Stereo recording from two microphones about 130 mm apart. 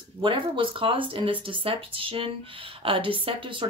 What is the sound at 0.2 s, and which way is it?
Speech, 40° right (ahead or behind).